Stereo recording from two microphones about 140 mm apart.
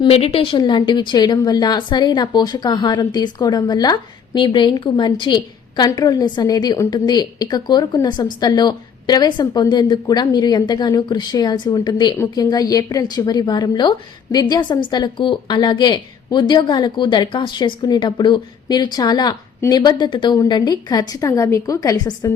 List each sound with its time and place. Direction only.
0.0 s a woman's voice: 45° left (ahead or behind)
0.6 s a woman's voice: 30° left (ahead or behind)